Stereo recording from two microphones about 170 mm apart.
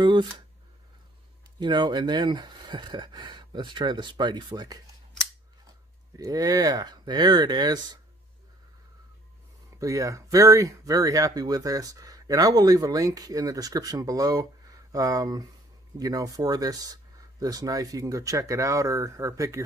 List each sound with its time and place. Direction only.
0.0 s speech: 25° right (ahead or behind)
1.6 s speech: 25° right (ahead or behind)
6.1 s speech: 20° right (ahead or behind)
9.7 s speech: 20° right (ahead or behind)